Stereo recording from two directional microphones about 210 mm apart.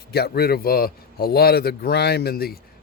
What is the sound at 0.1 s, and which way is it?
A man's voice, 50° left (ahead or behind).